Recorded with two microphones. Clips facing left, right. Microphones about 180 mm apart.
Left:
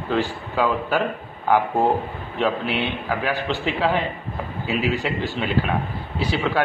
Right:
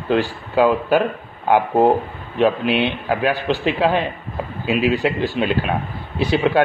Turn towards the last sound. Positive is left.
turn(degrees=-20)  # may be behind; listen again after turning